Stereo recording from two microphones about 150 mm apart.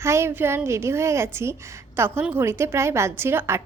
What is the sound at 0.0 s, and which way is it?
A woman's voice, 15° right (ahead or behind).